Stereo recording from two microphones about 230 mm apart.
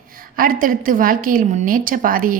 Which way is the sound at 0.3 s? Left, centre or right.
Right.